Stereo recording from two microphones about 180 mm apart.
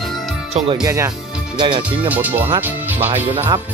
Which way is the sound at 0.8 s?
15° right (ahead or behind).